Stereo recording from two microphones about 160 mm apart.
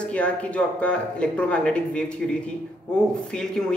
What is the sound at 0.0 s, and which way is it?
Speech, 5° left (ahead or behind).